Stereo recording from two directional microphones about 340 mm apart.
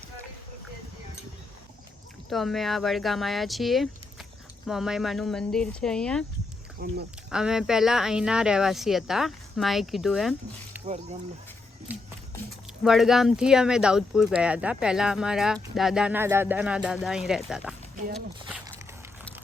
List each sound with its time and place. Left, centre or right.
2.3 s speech: centre
6.7 s speech: right
7.3 s speech: centre
10.8 s speech: centre
11.9 s speech: centre
18.1 s a sound: centre